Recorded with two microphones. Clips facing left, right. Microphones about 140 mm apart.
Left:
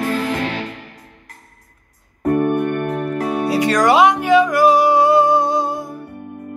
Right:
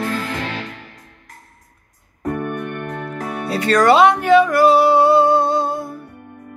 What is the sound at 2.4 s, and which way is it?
Music, 15° left (ahead or behind).